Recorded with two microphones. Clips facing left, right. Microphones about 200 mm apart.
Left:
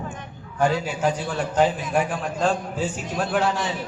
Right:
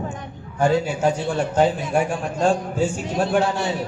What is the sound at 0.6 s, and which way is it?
A man's voice, 25° right (ahead or behind).